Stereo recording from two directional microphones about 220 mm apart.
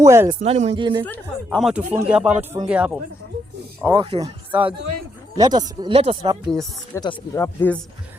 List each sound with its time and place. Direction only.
0.0 s speech: 15° right (ahead or behind)
0.4 s speech: 30° right (ahead or behind)
1.0 s speech: 5° left (ahead or behind)
3.8 s speech: 25° right (ahead or behind)
5.4 s speech: 20° right (ahead or behind)
6.5 s speech: centre (ahead or behind)
6.9 s speech: 15° left (ahead or behind)